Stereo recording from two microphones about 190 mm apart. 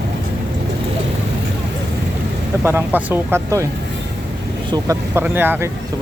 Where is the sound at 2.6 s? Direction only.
10° right (ahead or behind).